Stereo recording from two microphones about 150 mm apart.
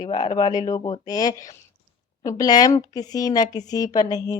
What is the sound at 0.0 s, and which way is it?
Speech, 30° left (ahead or behind).